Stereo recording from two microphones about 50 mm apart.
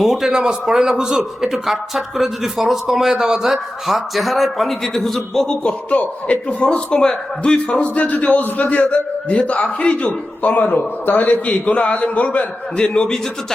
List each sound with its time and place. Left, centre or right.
0.0 s a man's voice: centre
5.9 s a man's voice: left
10.1 s a man's voice: left
12.7 s a man's voice: centre